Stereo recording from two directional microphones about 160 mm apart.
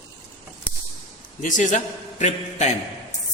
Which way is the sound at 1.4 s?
50° left (ahead or behind).